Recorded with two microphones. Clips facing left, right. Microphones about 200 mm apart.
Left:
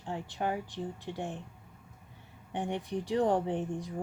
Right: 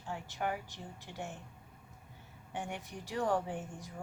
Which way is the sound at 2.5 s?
30° left (ahead or behind).